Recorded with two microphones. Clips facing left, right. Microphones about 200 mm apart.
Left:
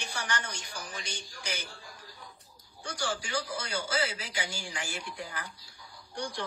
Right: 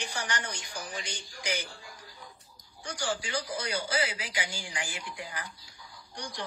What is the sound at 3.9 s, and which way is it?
A woman's voice, 15° right (ahead or behind).